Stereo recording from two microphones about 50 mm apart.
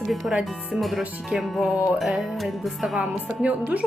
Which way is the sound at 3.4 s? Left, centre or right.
Right.